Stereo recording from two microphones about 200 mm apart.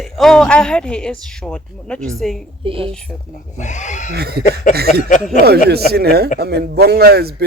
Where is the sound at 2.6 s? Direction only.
25° right (ahead or behind).